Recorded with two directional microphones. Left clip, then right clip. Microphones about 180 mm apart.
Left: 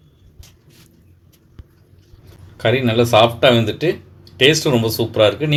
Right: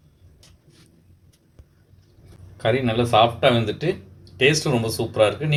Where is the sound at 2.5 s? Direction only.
40° left (ahead or behind).